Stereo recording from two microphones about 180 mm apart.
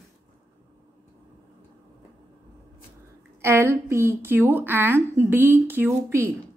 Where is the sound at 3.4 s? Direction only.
15° right (ahead or behind).